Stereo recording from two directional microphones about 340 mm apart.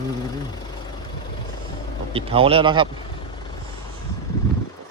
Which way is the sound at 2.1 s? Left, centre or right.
Centre.